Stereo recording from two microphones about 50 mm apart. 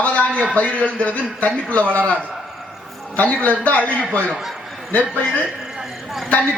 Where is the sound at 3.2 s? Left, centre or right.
Left.